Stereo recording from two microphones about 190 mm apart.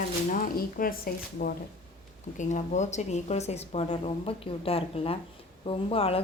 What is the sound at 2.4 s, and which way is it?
Speech, 40° left (ahead or behind).